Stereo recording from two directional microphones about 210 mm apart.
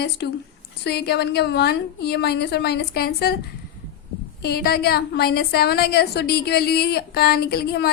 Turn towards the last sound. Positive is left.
turn(degrees=50)  # may be behind; listen again after turning